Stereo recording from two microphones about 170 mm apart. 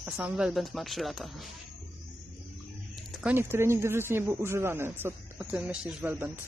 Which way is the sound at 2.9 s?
5° right (ahead or behind).